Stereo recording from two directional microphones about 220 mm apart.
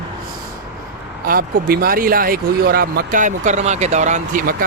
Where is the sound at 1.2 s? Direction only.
40° right (ahead or behind).